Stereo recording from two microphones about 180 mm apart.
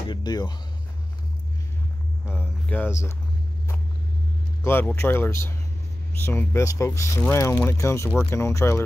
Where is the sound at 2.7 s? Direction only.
15° left (ahead or behind).